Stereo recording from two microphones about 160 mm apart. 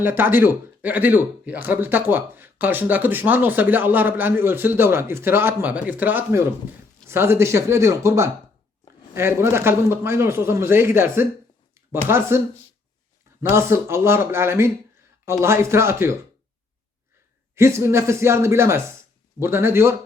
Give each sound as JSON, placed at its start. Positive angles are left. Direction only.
{"t": 0.0, "sound": "speech", "side_deg": -15}
{"t": 13.4, "sound": "speech", "side_deg": -15}
{"t": 17.5, "sound": "speech", "side_deg": -15}